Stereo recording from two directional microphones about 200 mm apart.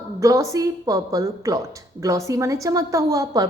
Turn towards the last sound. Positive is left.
turn(degrees=-15)  # may be behind; listen again after turning